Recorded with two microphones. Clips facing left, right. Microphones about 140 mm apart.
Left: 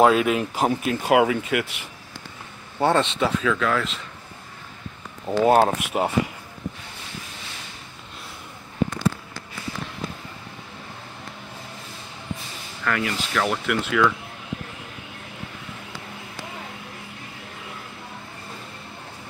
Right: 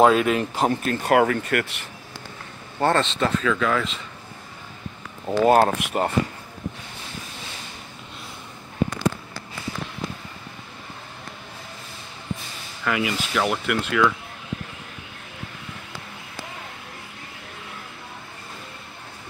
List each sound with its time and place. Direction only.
0.0 s speech: 5° left (ahead or behind)
2.8 s speech: 10° left (ahead or behind)
5.2 s speech: centre (ahead or behind)
12.8 s speech: 10° right (ahead or behind)